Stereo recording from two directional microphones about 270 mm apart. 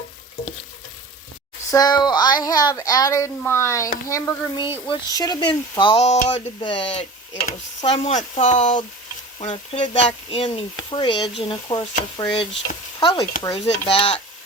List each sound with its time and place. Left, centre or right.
1.7 s a child's voice: centre
13.0 s stir: centre
13.4 s speech: centre